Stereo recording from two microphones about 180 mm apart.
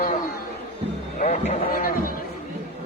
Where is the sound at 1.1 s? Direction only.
45° left (ahead or behind).